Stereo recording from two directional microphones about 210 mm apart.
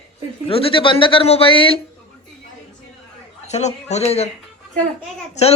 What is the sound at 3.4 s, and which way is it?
Speech, 30° left (ahead or behind).